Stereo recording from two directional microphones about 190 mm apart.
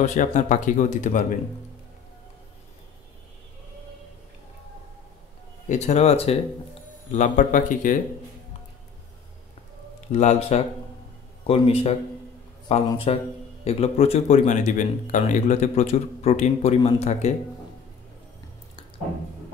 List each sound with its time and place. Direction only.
0.0 s speech: 40° left (ahead or behind)
5.7 s speech: 35° left (ahead or behind)
10.1 s speech: 35° left (ahead or behind)